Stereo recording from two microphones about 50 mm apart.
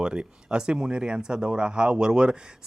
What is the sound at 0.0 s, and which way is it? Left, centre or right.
Speech, centre.